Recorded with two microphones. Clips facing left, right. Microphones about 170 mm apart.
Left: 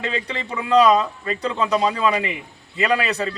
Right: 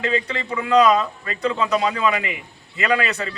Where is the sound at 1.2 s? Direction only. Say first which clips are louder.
Even; 30° left (ahead or behind).